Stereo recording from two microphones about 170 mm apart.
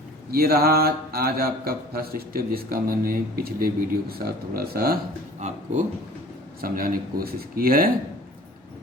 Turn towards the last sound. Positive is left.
turn(degrees=-60)  # may be behind; listen again after turning